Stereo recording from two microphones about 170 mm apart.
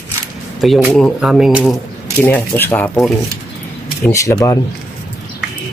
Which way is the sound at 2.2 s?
10° left (ahead or behind).